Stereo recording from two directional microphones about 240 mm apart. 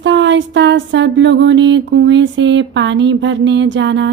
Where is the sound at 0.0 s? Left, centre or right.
Right.